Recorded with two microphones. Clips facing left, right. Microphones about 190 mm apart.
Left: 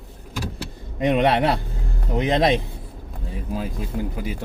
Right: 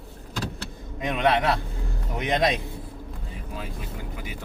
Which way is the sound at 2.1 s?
30° left (ahead or behind).